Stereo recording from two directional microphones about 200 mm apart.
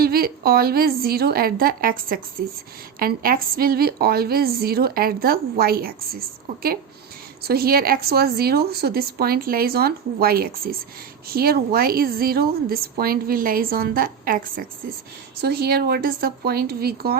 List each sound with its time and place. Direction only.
0.0 s a woman's voice: 50° right (ahead or behind)